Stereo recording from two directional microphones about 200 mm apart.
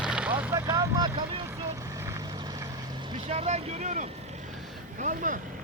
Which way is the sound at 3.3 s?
30° right (ahead or behind).